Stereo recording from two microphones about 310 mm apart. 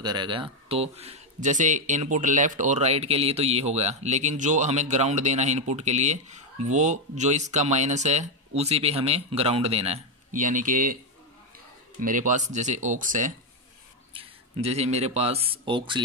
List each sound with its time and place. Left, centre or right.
0.0 s a man's voice: centre
12.0 s a man's voice: right